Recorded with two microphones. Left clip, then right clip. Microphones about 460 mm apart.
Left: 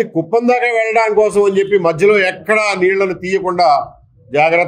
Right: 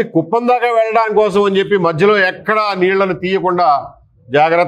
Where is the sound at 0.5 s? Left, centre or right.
Right.